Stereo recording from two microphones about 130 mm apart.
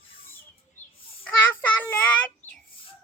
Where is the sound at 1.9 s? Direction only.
10° left (ahead or behind).